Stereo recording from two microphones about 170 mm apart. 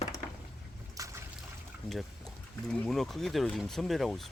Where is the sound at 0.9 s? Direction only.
20° right (ahead or behind).